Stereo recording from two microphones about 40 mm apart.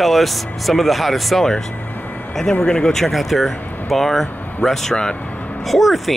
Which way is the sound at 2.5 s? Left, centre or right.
Left.